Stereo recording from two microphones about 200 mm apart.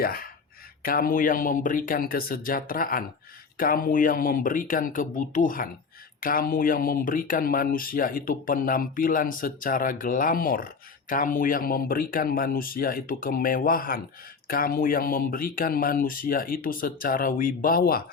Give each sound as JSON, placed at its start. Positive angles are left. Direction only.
{"t": 0.0, "sound": "speech", "side_deg": 45}